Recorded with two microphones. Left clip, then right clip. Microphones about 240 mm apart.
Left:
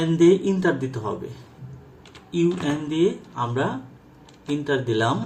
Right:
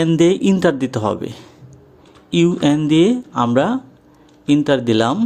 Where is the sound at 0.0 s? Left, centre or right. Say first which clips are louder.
Right 3 dB; right.